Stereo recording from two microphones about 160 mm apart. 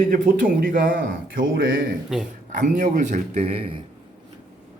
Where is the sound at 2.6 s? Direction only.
50° right (ahead or behind).